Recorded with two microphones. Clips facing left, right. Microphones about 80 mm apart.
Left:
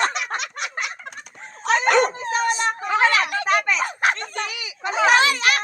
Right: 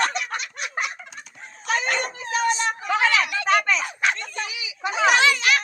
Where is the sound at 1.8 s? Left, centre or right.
Left.